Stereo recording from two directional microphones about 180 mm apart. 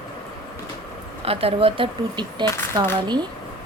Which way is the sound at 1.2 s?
30° right (ahead or behind).